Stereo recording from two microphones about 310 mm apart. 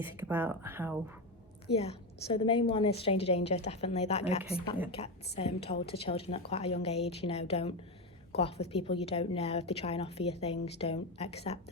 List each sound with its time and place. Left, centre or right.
0.0 s speech: centre
1.7 s a woman's voice: centre